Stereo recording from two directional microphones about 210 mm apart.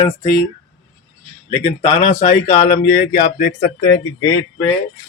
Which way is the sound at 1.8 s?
35° left (ahead or behind).